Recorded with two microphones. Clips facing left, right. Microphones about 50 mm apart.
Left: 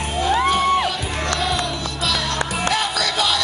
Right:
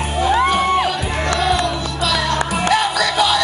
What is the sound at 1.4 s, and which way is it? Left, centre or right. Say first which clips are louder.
Music: right 5 dB; centre.